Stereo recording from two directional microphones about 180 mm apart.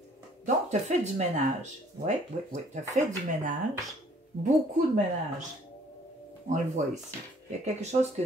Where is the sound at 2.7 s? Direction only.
40° right (ahead or behind).